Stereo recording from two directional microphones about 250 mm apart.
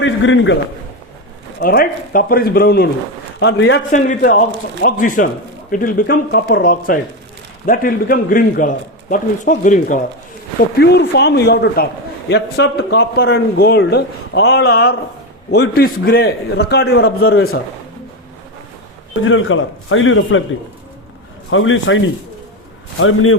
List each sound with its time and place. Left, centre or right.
0.0 s a man's voice: left
1.5 s a man's voice: left
3.9 s a man's voice: left
17.2 s a man's voice: left
19.2 s a man's voice: left
21.5 s a man's voice: left